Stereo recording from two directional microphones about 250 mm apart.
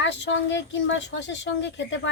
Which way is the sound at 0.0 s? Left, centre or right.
Left.